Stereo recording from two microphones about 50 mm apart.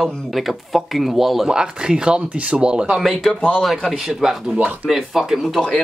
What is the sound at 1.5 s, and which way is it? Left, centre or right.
Speech, centre.